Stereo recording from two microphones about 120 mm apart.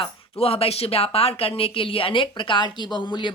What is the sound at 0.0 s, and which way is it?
Speech, 55° left (ahead or behind).